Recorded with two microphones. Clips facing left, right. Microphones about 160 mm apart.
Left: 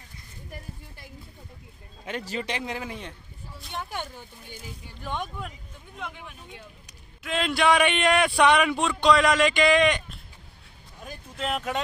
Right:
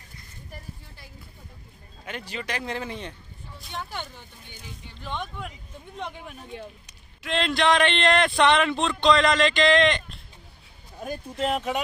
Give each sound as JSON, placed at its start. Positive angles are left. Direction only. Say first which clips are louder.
{"t": 2.0, "sound": "speech", "louder": "left 3 dB", "side_deg": 35}
{"t": 2.5, "sound": "speech", "louder": "right 1 dB", "side_deg": 15}
{"t": 5.9, "sound": "speech", "louder": "right 3 dB", "side_deg": -40}
{"t": 7.2, "sound": "speech", "louder": "even", "side_deg": 5}
{"t": 11.4, "sound": "speech", "louder": "right 3 dB", "side_deg": -5}